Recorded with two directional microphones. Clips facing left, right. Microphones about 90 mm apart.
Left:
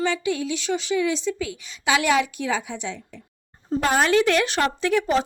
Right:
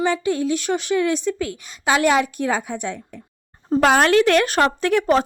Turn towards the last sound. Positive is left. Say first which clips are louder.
# right 3 dB
turn(degrees=-55)  # may be behind; listen again after turning